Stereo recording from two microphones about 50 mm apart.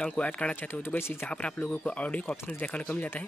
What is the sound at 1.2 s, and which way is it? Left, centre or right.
Speech, left.